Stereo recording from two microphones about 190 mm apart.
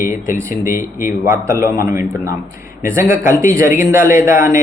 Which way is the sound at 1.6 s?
50° left (ahead or behind).